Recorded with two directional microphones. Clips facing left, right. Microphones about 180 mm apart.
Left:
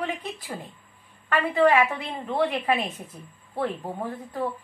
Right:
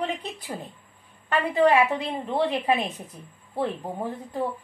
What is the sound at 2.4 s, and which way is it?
A woman's voice, 20° right (ahead or behind).